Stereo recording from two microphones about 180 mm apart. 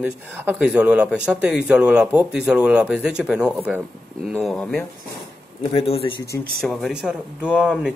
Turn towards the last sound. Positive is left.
turn(degrees=-5)  # may be behind; listen again after turning